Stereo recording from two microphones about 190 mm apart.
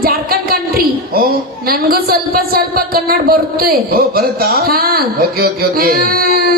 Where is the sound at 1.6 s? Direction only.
50° right (ahead or behind).